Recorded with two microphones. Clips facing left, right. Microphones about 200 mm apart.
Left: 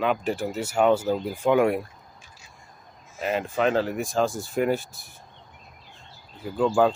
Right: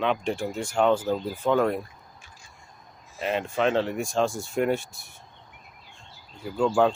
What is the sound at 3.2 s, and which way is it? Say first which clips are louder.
Speech: left 1 dB; centre (ahead or behind).